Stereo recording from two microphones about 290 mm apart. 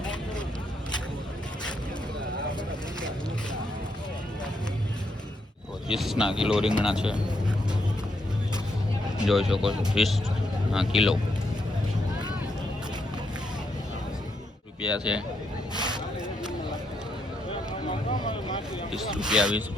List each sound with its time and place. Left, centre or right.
0.0 s vehicle: centre
5.9 s speech: centre
9.1 s speech: centre
14.8 s speech: centre
15.7 s a sound: centre
18.3 s vehicle: centre
18.9 s speech: centre